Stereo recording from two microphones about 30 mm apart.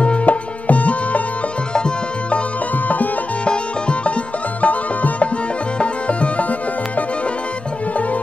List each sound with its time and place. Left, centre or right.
0.0 s music: left
4.6 s music: left